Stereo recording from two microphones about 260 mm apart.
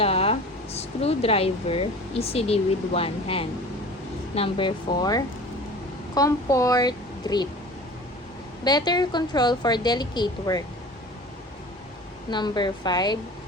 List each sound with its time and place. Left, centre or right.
0.0 s a woman's voice: left
8.6 s a woman's voice: centre
12.3 s a woman's voice: centre